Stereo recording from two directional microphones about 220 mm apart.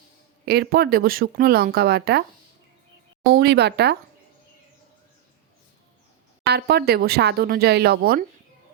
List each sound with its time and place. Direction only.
0.4 s speech: 45° right (ahead or behind)
3.3 s speech: 50° right (ahead or behind)
6.5 s speech: 45° right (ahead or behind)